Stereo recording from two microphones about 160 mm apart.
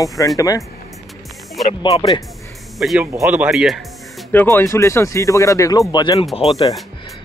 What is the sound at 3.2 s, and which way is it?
Speech, 10° right (ahead or behind).